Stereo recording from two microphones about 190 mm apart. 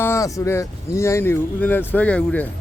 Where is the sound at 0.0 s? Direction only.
15° left (ahead or behind).